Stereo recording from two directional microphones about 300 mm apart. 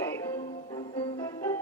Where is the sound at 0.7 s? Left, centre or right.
Centre.